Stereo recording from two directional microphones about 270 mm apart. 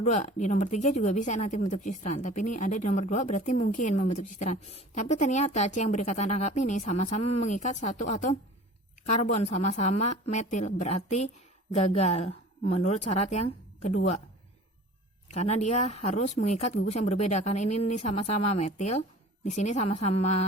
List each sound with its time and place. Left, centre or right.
0.0 s speech: left
15.3 s speech: left